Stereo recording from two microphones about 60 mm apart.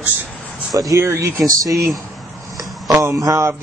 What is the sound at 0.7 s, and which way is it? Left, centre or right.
Speech, right.